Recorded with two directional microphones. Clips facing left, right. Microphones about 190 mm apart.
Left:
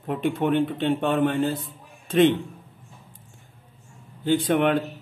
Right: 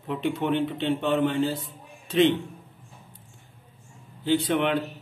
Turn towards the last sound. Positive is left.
turn(degrees=50)  # may be behind; listen again after turning